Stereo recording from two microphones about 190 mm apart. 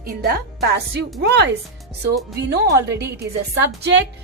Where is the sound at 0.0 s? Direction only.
50° right (ahead or behind).